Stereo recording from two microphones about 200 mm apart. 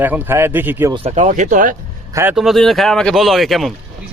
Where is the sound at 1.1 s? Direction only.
40° right (ahead or behind).